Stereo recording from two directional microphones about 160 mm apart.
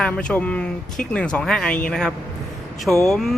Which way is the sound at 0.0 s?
5° left (ahead or behind).